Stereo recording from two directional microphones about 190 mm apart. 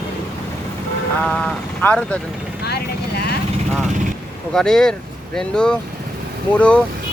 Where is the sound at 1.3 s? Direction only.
5° left (ahead or behind).